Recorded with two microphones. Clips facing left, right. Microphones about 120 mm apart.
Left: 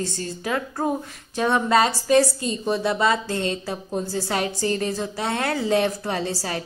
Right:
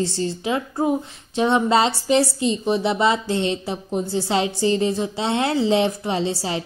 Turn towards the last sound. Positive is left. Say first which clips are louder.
# right 3 dB
turn(degrees=-20)  # may be behind; listen again after turning